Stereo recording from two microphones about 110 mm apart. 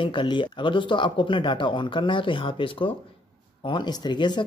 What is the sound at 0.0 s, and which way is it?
Speech, 50° left (ahead or behind).